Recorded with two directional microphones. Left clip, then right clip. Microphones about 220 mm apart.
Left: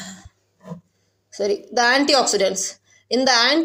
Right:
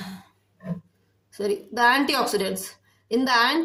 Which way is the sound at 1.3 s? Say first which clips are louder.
Left 6 dB; 10° left (ahead or behind).